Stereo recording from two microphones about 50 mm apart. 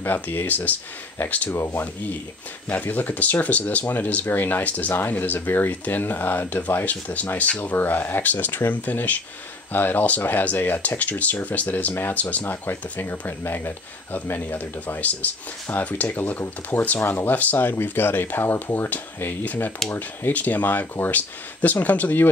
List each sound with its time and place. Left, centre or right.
0.0 s speech: left
1.5 s speech: left
2.7 s speech: left
7.7 s speech: left
12.6 s speech: left